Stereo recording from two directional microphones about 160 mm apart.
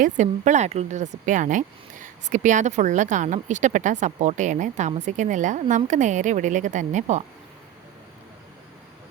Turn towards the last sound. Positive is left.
turn(degrees=-50)  # may be behind; listen again after turning